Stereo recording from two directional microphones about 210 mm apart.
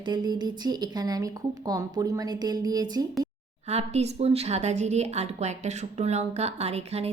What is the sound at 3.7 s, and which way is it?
A woman's voice, 30° right (ahead or behind).